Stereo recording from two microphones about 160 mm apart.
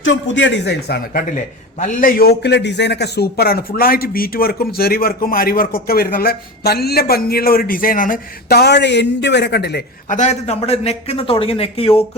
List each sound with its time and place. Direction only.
0.5 s speech: 90° left
1.8 s a man's voice: 60° left (ahead or behind); by 9.8 s 90° left
10.1 s speech: 45° left (ahead or behind)